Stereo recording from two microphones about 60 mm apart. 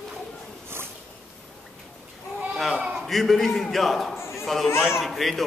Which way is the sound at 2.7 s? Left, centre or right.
Centre.